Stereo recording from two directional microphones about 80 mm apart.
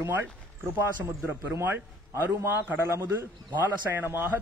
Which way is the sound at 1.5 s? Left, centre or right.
Right.